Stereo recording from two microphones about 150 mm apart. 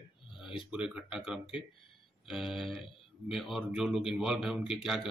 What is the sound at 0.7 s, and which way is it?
Speech, 5° right (ahead or behind).